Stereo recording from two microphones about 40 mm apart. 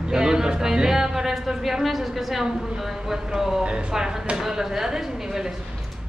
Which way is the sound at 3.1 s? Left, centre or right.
Centre.